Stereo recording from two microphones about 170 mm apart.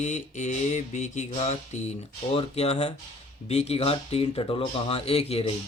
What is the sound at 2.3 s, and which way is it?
Speech, 40° left (ahead or behind).